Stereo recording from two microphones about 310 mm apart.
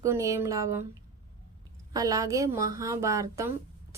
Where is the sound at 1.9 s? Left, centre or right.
Centre.